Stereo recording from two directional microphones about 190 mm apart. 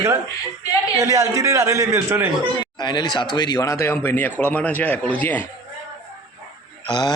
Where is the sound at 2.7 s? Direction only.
20° left (ahead or behind).